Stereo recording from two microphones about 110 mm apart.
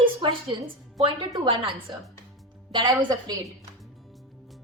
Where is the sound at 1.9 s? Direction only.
45° right (ahead or behind).